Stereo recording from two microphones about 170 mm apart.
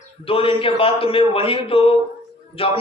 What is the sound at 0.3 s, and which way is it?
Speech, 35° left (ahead or behind).